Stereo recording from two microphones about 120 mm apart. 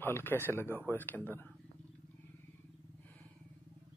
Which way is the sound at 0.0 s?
15° left (ahead or behind).